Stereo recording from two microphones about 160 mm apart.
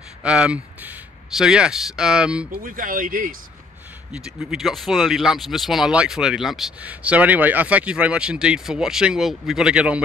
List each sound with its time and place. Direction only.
0.2 s speech: 5° right (ahead or behind)
2.5 s speech: 60° right (ahead or behind)
4.1 s speech: 5° right (ahead or behind)